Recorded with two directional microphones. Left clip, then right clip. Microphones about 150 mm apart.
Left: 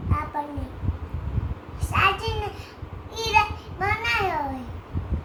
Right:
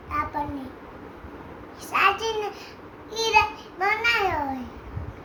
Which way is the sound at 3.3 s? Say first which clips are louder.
Even; 20° right (ahead or behind).